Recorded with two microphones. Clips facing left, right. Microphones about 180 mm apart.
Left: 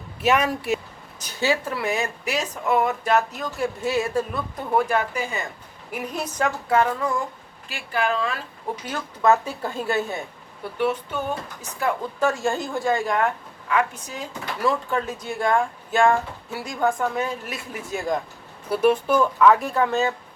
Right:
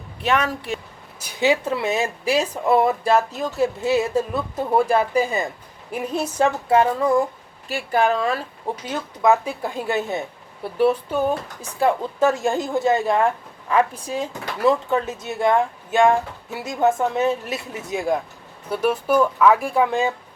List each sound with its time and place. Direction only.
0.2 s speech: 10° left (ahead or behind)
1.2 s speech: 15° right (ahead or behind)
7.7 s speech: 40° right (ahead or behind)
8.9 s speech: 15° right (ahead or behind)
10.8 s speech: 35° right (ahead or behind)
11.8 s speech: 20° right (ahead or behind)
18.7 s speech: centre (ahead or behind)